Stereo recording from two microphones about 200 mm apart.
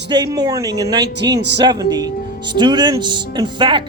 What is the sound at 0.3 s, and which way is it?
Speech, 15° right (ahead or behind).